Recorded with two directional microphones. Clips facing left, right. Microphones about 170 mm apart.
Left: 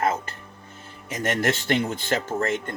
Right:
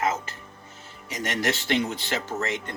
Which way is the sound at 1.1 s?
50° left (ahead or behind).